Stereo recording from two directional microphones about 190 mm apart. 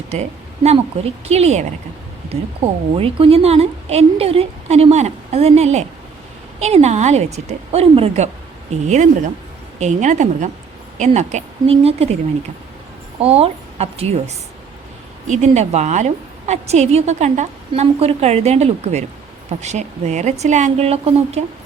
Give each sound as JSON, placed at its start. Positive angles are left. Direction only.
{"t": 0.1, "sound": "a woman's voice", "side_deg": -35}
{"t": 2.9, "sound": "a woman's voice", "side_deg": -30}
{"t": 13.1, "sound": "a woman's voice", "side_deg": -30}